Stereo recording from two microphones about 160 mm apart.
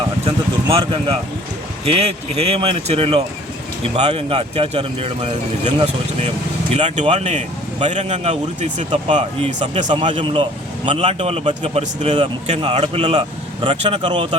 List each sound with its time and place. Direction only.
0.3 s a man's voice: 35° right (ahead or behind)
9.9 s speech: 30° right (ahead or behind)
14.1 s speech: 30° right (ahead or behind)